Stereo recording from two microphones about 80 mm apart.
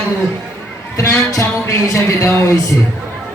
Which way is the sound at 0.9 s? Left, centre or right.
Left.